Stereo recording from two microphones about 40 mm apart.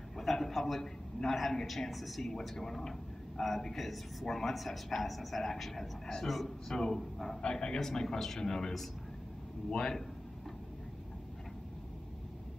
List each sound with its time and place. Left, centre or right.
0.2 s a man's voice: centre
7.5 s speech: centre